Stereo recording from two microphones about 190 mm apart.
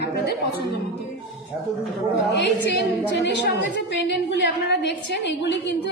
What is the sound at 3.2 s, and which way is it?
A woman's voice, 65° left (ahead or behind).